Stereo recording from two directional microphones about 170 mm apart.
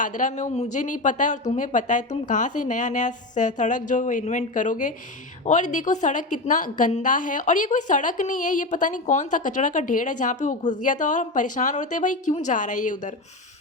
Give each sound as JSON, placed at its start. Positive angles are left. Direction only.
{"t": 0.0, "sound": "a woman's voice", "side_deg": 50}